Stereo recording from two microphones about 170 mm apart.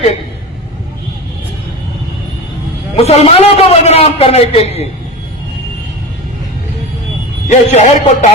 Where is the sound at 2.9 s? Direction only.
35° left (ahead or behind).